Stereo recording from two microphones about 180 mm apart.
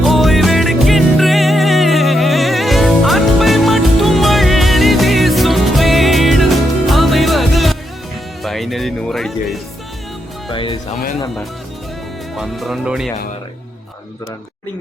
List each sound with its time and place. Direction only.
0.0 s music: centre (ahead or behind)
10.5 s music: 30° left (ahead or behind)
12.4 s speech: centre (ahead or behind)